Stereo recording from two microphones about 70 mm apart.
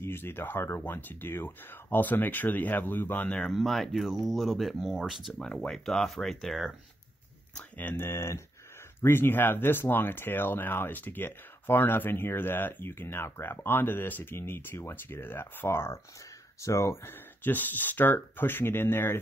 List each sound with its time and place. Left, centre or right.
0.0 s speech: left
3.4 s speech: centre
5.7 s speech: centre
7.7 s speech: left